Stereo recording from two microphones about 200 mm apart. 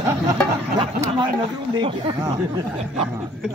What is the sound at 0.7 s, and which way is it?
Speech, 20° right (ahead or behind).